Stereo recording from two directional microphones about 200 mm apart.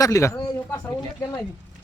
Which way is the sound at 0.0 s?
15° left (ahead or behind).